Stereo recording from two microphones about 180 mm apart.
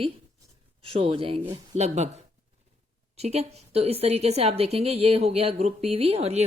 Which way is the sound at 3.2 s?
35° right (ahead or behind).